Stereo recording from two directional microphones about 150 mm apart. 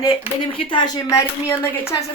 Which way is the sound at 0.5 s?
35° left (ahead or behind).